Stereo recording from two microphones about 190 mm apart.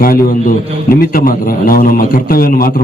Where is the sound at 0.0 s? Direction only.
50° left (ahead or behind).